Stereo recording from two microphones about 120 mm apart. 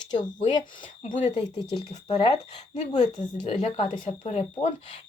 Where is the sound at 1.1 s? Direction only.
40° left (ahead or behind).